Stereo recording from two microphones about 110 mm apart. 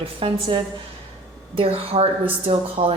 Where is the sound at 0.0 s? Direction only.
60° right (ahead or behind).